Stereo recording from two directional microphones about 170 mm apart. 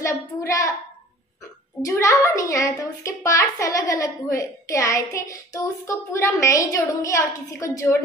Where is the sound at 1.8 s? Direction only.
20° left (ahead or behind).